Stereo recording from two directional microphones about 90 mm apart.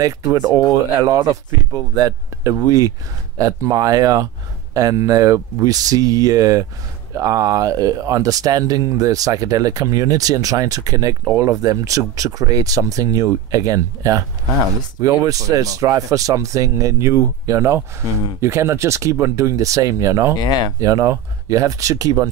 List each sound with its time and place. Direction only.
0.0 s speech: 40° right (ahead or behind)